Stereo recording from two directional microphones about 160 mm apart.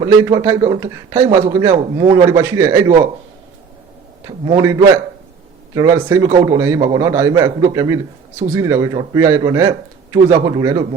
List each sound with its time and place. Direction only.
0.0 s a man's voice: 20° right (ahead or behind)
4.3 s a man's voice: 25° right (ahead or behind)